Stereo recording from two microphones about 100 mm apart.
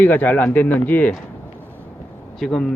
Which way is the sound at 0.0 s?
20° left (ahead or behind).